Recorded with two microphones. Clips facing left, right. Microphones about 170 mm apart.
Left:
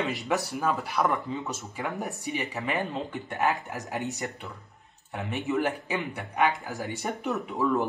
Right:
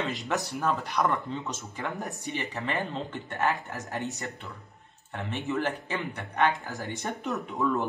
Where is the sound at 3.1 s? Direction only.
15° left (ahead or behind).